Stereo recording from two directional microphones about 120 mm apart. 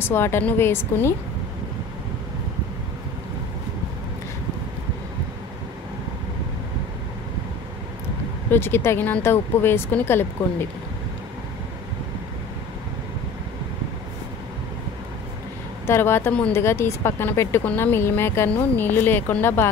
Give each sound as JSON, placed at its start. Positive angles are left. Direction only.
{"t": 0.0, "sound": "speech", "side_deg": 20}
{"t": 8.5, "sound": "speech", "side_deg": 20}
{"t": 15.9, "sound": "speech", "side_deg": 20}